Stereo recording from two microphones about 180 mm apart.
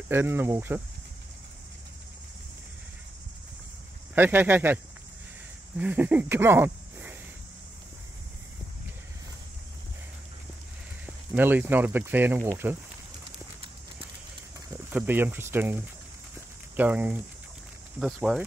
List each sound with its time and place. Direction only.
0.1 s speech: 15° right (ahead or behind)
4.1 s speech: 10° right (ahead or behind)
5.8 s speech: 10° right (ahead or behind)
11.3 s speech: 10° right (ahead or behind)
14.9 s speech: 10° right (ahead or behind)